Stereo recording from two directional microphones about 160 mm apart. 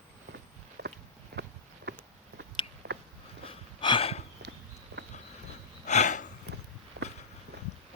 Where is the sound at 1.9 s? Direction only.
90° right.